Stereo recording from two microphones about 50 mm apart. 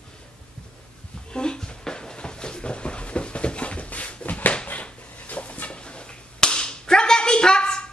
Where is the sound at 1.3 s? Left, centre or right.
Centre.